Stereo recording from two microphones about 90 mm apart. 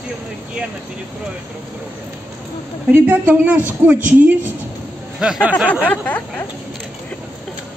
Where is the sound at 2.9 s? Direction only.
20° right (ahead or behind).